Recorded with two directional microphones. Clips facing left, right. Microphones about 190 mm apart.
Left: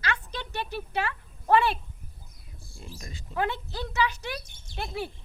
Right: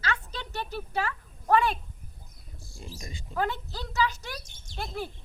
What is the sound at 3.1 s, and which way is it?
Speech, 5° left (ahead or behind).